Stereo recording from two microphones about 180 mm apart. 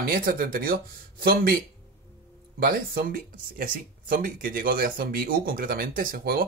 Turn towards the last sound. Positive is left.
turn(degrees=-55)  # may be behind; listen again after turning